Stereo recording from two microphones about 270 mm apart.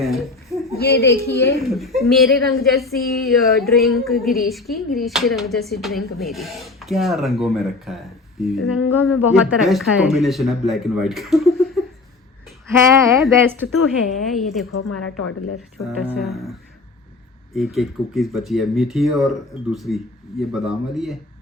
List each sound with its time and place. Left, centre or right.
0.0 s a sound: centre
0.8 s a woman's voice: left
1.6 s speech: centre
13.2 s speech: centre
14.7 s a woman's voice: left
15.8 s speech: centre